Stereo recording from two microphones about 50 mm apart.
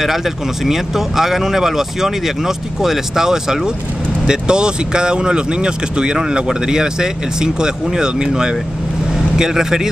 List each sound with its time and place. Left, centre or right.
0.0 s speech: centre